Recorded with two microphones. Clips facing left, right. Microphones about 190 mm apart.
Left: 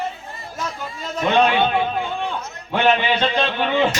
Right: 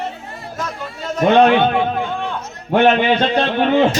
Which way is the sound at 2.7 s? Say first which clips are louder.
Right 5 dB; 60° right (ahead or behind).